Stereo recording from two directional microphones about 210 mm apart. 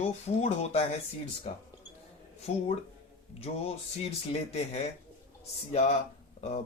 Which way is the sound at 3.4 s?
30° left (ahead or behind).